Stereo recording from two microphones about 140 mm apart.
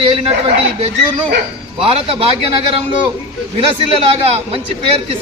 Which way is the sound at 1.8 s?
40° right (ahead or behind).